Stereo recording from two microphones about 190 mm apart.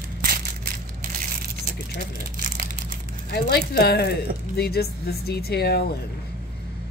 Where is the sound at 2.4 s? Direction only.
45° right (ahead or behind).